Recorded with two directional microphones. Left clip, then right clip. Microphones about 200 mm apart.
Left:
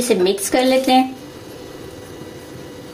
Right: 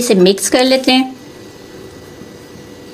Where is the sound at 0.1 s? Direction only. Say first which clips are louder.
Right 6 dB; 45° right (ahead or behind).